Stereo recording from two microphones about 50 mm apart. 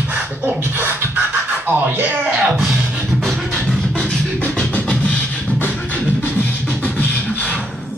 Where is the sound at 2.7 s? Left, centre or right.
Right.